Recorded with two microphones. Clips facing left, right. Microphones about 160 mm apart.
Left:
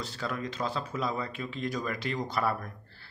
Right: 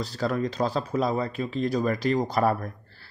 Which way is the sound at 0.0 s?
40° right (ahead or behind).